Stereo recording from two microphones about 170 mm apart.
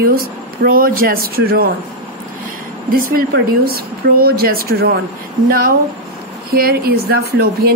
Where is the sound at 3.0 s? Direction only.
60° right (ahead or behind).